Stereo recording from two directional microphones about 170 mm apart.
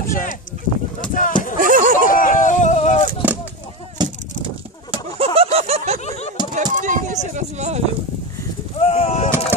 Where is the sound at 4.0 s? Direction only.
30° right (ahead or behind).